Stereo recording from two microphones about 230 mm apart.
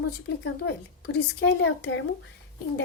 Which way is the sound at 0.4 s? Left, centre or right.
Left.